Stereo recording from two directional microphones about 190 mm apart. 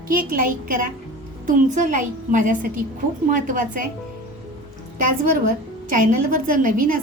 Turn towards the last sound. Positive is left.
turn(degrees=-45)  # may be behind; listen again after turning